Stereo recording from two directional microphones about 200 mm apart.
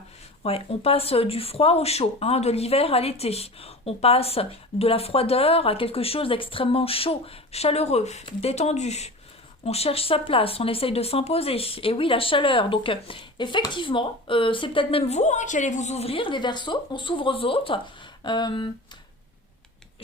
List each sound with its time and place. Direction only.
0.4 s speech: 30° left (ahead or behind)